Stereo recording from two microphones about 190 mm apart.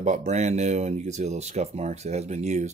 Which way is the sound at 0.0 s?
35° right (ahead or behind).